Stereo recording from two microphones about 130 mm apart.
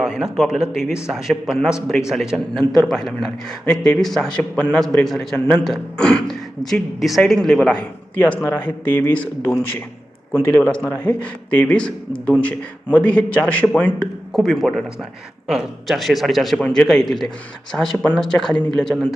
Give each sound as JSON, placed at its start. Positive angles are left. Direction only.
{"t": 0.0, "sound": "a man's voice", "side_deg": -5}
{"t": 8.2, "sound": "a man's voice", "side_deg": 15}
{"t": 14.3, "sound": "a man's voice", "side_deg": 0}